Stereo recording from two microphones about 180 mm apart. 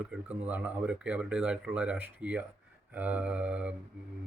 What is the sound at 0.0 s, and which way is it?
Speech, 5° right (ahead or behind).